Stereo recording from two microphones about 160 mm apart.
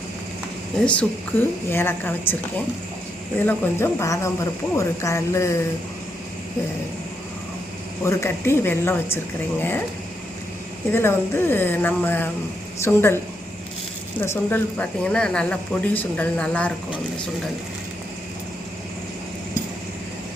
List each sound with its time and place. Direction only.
0.8 s speech: 10° left (ahead or behind)
8.0 s speech: 15° left (ahead or behind)
10.9 s speech: 15° left (ahead or behind)
14.2 s speech: 10° left (ahead or behind)